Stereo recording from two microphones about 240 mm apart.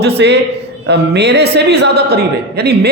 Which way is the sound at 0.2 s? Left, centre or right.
Right.